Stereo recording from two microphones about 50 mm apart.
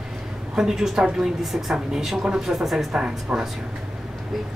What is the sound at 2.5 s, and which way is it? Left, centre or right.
Speech, centre.